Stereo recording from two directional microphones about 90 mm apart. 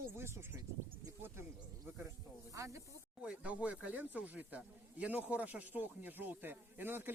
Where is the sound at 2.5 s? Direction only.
35° right (ahead or behind).